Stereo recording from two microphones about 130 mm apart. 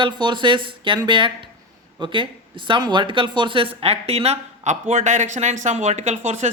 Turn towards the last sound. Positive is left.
turn(degrees=-60)  # may be behind; listen again after turning